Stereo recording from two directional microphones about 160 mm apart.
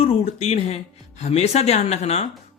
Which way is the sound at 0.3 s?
45° left (ahead or behind).